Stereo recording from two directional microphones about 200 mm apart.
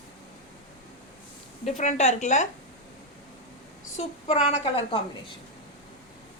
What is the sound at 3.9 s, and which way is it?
A woman's voice, 30° left (ahead or behind).